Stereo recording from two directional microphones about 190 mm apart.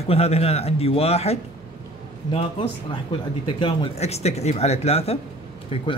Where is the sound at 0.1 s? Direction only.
35° left (ahead or behind).